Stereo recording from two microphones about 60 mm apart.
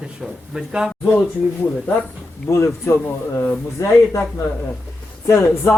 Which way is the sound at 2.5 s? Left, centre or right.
Left.